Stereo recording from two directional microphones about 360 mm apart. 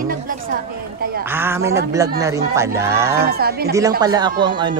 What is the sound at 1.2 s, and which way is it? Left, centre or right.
Speech, centre.